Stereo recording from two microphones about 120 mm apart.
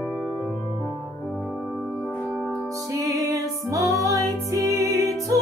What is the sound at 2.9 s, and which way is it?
Music, 30° right (ahead or behind).